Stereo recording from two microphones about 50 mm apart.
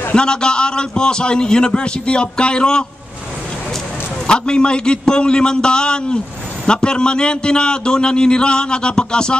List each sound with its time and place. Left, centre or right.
0.1 s a man's voice: centre
4.3 s a man's voice: centre